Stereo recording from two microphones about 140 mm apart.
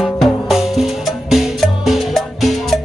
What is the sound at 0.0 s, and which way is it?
Music, centre (ahead or behind).